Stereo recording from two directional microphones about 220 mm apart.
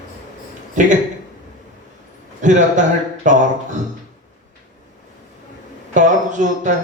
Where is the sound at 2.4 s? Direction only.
35° right (ahead or behind).